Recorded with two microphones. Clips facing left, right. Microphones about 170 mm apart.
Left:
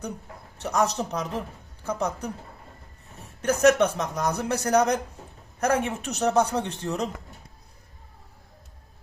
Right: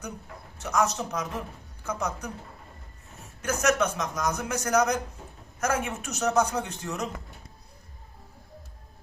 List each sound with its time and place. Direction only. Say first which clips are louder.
0.6 s a man's voice: left 2 dB; 35° left (ahead or behind)
3.4 s a man's voice: left 6 dB; 35° left (ahead or behind)